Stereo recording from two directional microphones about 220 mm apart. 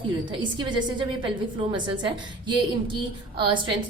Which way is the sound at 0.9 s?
20° right (ahead or behind).